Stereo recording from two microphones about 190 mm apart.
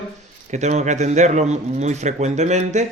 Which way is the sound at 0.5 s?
35° right (ahead or behind).